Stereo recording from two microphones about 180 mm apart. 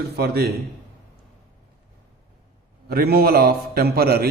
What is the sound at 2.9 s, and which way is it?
A man's voice, 60° right (ahead or behind).